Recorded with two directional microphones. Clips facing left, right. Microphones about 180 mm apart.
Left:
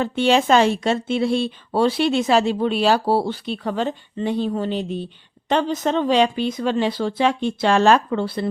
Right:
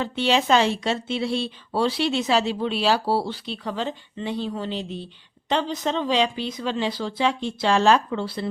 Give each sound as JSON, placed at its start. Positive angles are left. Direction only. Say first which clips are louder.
{"t": 0.0, "sound": "a woman's voice", "louder": "left 4 dB", "side_deg": 50}